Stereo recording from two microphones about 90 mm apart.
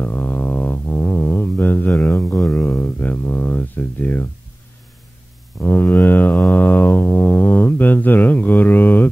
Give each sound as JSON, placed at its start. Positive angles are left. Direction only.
{"t": 0.0, "sound": "music", "side_deg": 20}
{"t": 2.0, "sound": "a sound", "side_deg": 25}
{"t": 5.6, "sound": "mantra", "side_deg": 20}
{"t": 6.5, "sound": "didgeridoo", "side_deg": 20}